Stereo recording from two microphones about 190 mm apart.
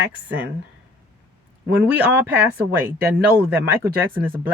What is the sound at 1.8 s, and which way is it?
Speech, 5° right (ahead or behind).